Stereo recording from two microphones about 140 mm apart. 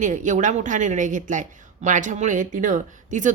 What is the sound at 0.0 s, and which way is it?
Speech, 65° right (ahead or behind).